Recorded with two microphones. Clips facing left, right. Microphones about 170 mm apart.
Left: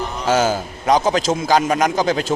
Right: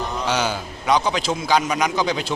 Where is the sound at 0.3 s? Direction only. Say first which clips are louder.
Left 8 dB; 45° left (ahead or behind).